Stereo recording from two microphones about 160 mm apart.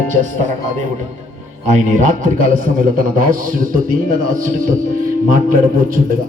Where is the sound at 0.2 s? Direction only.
50° right (ahead or behind).